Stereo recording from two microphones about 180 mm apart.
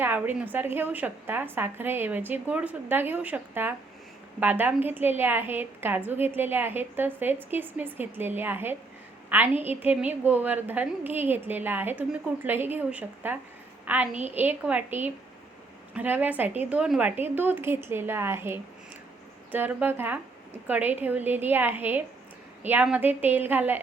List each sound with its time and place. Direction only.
0.0 s a woman's voice: 10° right (ahead or behind)